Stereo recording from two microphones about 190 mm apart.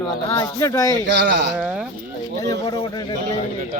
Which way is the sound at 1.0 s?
70° right (ahead or behind).